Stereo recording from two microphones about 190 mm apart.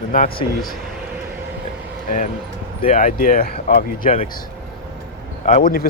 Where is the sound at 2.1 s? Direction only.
45° left (ahead or behind).